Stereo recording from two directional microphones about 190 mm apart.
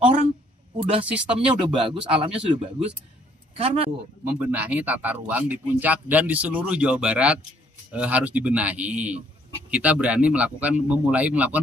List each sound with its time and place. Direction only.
0.7 s speech: 30° right (ahead or behind)
4.2 s a man's voice: 10° right (ahead or behind)